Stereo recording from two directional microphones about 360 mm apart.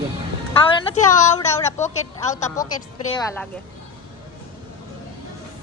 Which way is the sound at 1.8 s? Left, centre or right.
Centre.